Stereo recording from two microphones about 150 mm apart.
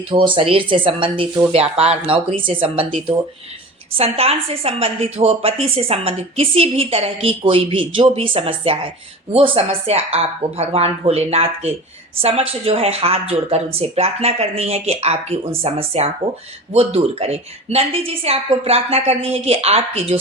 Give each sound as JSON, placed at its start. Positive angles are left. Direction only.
{"t": 0.1, "sound": "a woman's voice", "side_deg": -35}